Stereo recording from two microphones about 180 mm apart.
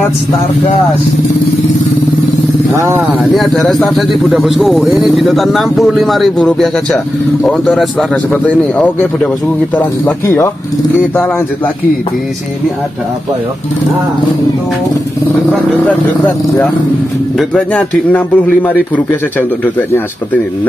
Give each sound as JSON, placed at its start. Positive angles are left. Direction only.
{"t": 2.7, "sound": "speech", "side_deg": -15}
{"t": 3.3, "sound": "a man's voice", "side_deg": 0}
{"t": 17.4, "sound": "a man's voice", "side_deg": 5}